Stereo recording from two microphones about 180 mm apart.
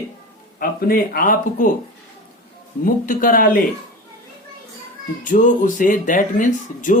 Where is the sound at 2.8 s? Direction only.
50° left (ahead or behind).